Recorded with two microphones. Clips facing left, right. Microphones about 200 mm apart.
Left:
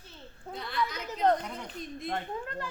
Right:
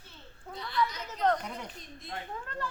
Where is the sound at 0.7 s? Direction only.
55° left (ahead or behind).